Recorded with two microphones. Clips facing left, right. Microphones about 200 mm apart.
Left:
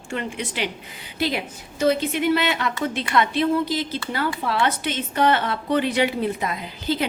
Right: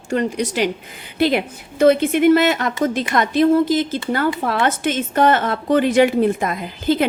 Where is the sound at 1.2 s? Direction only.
55° right (ahead or behind).